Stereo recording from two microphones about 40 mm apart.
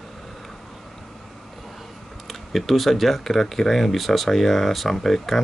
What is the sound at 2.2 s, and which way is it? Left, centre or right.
Speech, centre.